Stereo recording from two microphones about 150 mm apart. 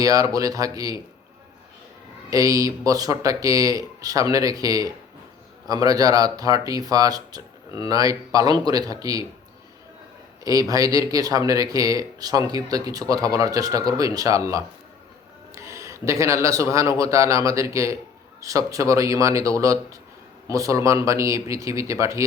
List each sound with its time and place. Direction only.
0.0 s speech: 25° right (ahead or behind)
2.3 s speech: 20° right (ahead or behind)
10.4 s speech: 25° right (ahead or behind)